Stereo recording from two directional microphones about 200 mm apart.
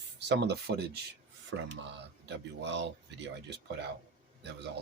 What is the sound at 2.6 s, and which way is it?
Speech, 60° right (ahead or behind).